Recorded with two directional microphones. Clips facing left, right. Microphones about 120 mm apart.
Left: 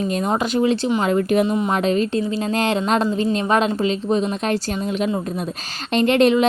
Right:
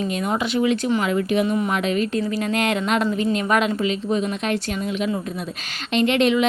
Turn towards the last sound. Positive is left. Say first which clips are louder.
# left 3 dB
turn(degrees=40)  # may be behind; listen again after turning